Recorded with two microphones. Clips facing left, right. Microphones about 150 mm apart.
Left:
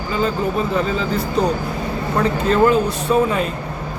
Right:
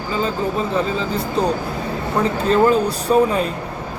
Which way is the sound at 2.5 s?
35° right (ahead or behind).